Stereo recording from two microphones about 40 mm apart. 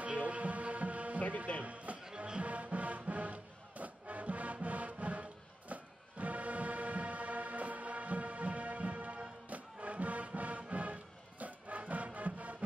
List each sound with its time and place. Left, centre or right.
0.0 s music: right